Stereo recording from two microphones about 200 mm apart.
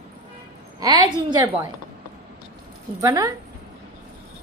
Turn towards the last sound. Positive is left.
turn(degrees=-15)  # may be behind; listen again after turning